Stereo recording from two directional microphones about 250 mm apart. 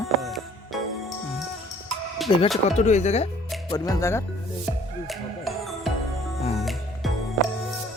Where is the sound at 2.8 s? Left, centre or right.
Left.